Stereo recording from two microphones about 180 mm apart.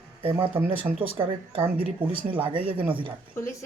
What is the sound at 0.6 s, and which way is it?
Speech, 10° right (ahead or behind).